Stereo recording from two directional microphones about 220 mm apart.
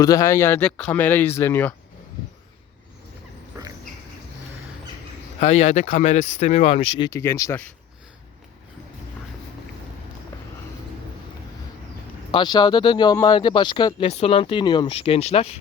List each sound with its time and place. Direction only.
0.0 s speech: 15° left (ahead or behind)
5.4 s speech: 30° left (ahead or behind); by 7.7 s 10° left (ahead or behind)
12.3 s speech: 20° left (ahead or behind)